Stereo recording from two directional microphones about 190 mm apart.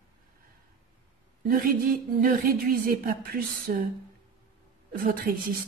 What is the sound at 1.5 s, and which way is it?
Speech, 50° right (ahead or behind).